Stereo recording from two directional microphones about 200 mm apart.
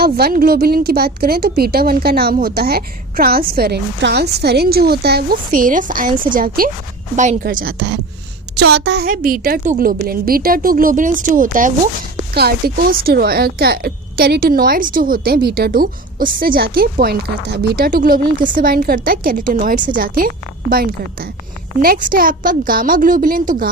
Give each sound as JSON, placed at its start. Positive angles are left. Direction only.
{"t": 0.0, "sound": "speech", "side_deg": -50}